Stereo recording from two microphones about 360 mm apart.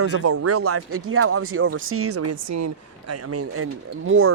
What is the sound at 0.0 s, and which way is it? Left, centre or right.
Speech, right.